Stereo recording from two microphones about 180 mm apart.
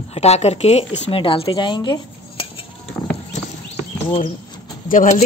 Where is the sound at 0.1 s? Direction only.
35° left (ahead or behind).